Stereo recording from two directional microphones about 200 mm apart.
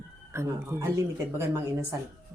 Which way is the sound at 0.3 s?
15° right (ahead or behind).